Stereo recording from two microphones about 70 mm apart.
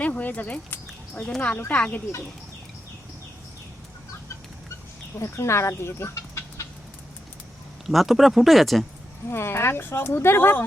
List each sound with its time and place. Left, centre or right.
0.0 s a sound: left
1.2 s speech: centre
5.2 s speech: left
7.9 s speech: centre
9.3 s speech: left